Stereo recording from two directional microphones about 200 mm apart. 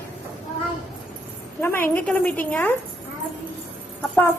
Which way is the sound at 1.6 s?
10° left (ahead or behind).